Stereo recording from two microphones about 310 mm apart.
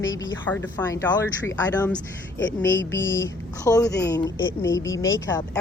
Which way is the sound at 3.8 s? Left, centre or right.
Left.